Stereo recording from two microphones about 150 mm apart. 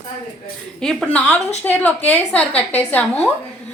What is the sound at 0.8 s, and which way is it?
Speech, centre (ahead or behind).